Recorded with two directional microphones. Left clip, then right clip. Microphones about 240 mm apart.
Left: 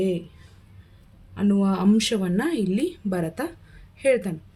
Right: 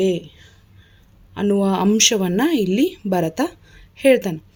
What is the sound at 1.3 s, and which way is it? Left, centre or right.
A woman's voice, right.